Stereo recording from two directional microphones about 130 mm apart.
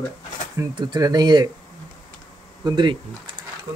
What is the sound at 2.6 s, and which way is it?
Speech, 30° right (ahead or behind).